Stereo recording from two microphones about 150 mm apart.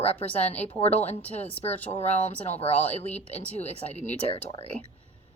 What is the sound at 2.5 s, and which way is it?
Speech, 40° left (ahead or behind).